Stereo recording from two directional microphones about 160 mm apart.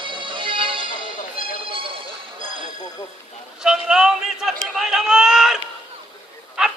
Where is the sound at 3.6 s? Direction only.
5° right (ahead or behind).